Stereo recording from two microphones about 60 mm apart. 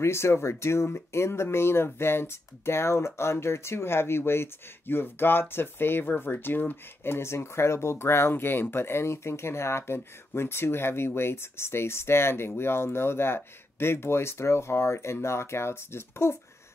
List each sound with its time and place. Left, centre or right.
0.0 s speech: left